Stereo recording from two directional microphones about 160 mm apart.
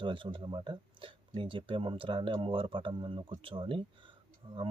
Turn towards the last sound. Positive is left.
turn(degrees=-30)  # may be behind; listen again after turning